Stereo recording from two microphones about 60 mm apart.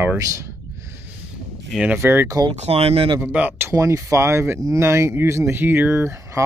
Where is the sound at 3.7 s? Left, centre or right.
Right.